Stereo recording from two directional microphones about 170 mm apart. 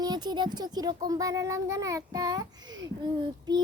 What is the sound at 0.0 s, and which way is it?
A child's voice, 25° right (ahead or behind).